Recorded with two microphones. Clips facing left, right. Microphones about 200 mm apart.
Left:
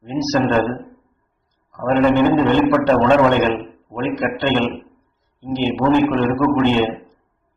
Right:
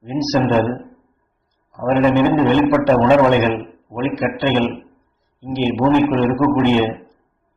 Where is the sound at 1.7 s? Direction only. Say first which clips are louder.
Even; 15° right (ahead or behind).